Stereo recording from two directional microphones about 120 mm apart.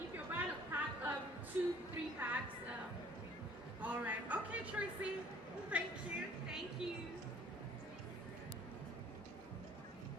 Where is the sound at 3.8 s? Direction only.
15° right (ahead or behind).